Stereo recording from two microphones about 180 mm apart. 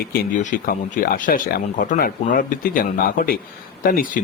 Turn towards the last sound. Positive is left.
turn(degrees=50)  # may be behind; listen again after turning